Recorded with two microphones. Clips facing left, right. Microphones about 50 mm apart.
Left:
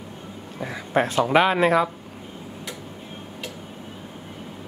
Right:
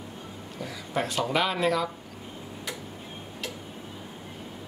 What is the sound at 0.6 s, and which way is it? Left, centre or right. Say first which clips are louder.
Speech: left 8 dB; left.